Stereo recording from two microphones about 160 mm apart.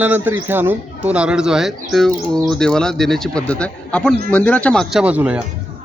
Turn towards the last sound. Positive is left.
turn(degrees=-10)  # may be behind; listen again after turning